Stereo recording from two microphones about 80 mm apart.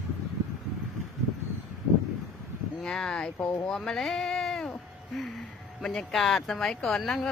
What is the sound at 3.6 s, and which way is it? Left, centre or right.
Speech, centre.